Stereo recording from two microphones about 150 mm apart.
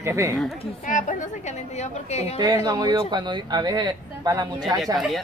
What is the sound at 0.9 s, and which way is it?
A woman's voice, 60° left (ahead or behind).